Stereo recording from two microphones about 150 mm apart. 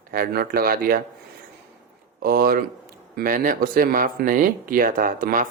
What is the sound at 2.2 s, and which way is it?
Speech, 75° right (ahead or behind).